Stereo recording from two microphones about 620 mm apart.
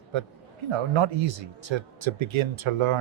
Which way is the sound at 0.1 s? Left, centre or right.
Right.